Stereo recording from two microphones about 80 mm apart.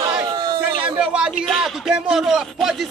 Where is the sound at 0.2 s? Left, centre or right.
Right.